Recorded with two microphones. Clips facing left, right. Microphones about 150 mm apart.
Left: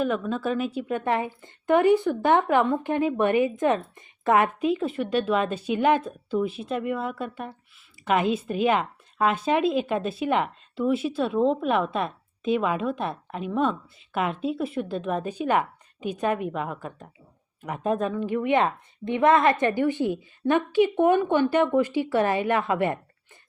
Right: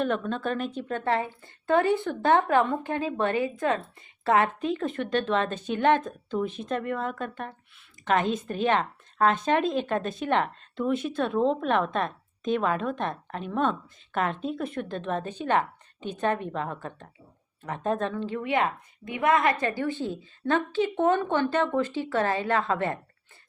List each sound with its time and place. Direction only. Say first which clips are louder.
0.0 s speech: left 2 dB; 5° left (ahead or behind)